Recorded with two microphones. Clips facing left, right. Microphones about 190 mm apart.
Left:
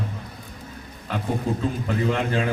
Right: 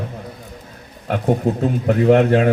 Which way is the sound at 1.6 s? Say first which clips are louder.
Right 8 dB; 65° right (ahead or behind).